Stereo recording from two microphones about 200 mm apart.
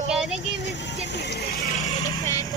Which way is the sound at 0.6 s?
60° left (ahead or behind).